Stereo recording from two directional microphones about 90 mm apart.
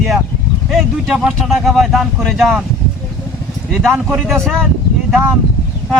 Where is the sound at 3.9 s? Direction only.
15° right (ahead or behind).